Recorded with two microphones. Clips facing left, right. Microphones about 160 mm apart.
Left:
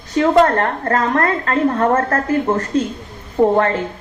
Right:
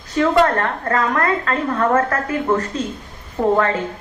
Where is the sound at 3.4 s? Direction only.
35° left (ahead or behind).